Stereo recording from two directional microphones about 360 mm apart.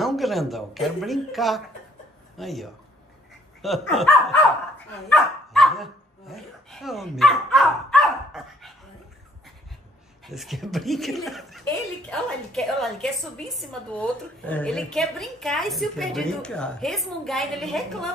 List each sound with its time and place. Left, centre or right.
0.0 s a woman's voice: centre
10.2 s a woman's voice: centre